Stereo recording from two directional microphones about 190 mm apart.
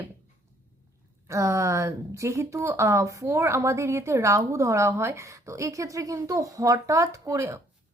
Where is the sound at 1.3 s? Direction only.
15° right (ahead or behind).